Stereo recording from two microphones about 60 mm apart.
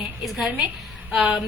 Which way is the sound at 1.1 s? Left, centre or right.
Centre.